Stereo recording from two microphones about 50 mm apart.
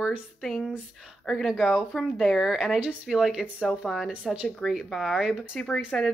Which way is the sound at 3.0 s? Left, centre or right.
Centre.